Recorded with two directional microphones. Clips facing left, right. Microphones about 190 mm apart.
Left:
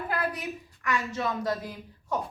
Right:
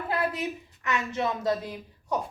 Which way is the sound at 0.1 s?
25° right (ahead or behind).